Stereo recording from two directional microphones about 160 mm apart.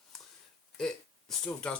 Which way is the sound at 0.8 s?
5° left (ahead or behind).